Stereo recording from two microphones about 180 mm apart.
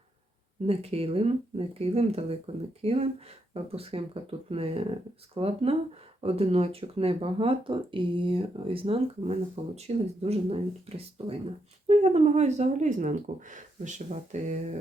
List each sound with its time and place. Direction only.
0.7 s speech: 35° right (ahead or behind)